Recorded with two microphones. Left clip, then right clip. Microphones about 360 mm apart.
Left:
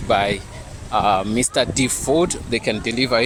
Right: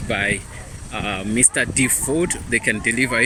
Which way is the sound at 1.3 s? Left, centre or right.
Centre.